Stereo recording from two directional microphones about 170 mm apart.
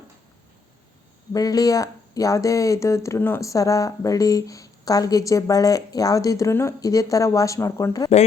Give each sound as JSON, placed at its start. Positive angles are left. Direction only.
{"t": 1.3, "sound": "speech", "side_deg": 20}